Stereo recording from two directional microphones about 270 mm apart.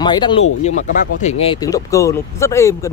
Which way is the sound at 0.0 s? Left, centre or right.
Centre.